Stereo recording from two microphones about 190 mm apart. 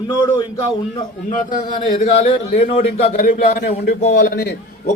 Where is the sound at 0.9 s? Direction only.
45° left (ahead or behind).